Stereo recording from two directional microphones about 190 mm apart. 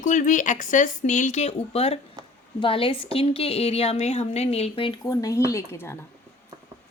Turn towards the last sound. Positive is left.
turn(degrees=15)  # may be behind; listen again after turning